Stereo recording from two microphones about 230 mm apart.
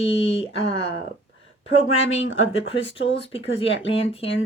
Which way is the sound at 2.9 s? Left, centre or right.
Left.